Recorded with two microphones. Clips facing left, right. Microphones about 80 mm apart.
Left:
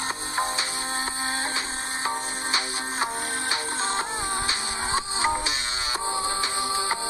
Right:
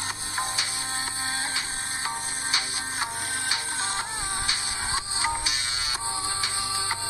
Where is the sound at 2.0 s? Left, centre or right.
Left.